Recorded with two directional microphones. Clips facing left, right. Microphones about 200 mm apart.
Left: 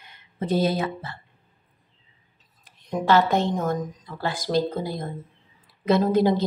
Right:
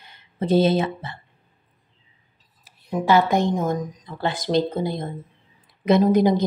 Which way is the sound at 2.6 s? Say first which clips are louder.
Right 2 dB; 5° right (ahead or behind).